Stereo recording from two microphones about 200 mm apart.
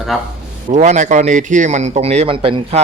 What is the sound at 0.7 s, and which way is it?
A man's voice, 35° right (ahead or behind).